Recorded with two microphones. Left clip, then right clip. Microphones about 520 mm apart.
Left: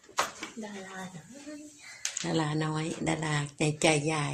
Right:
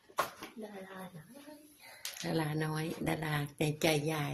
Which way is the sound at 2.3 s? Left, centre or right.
Right.